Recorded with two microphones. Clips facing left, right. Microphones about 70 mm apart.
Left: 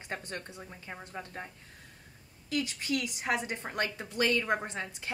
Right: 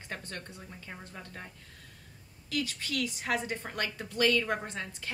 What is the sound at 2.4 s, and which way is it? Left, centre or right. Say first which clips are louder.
A woman's voice: left 2 dB; left.